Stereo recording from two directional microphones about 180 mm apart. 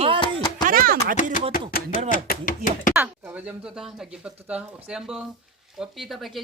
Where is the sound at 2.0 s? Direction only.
50° left (ahead or behind).